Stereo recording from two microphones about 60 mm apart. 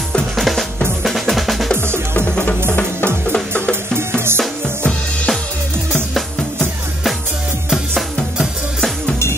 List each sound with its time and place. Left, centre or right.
0.4 s drum: centre
2.1 s music: left